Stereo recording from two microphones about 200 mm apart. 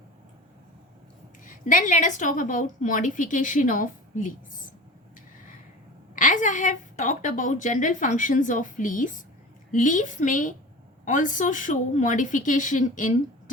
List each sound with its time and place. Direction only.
1.5 s a woman's voice: 40° left (ahead or behind)
6.1 s a woman's voice: 40° left (ahead or behind)